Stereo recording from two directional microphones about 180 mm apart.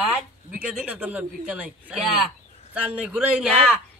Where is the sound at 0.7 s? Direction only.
10° right (ahead or behind).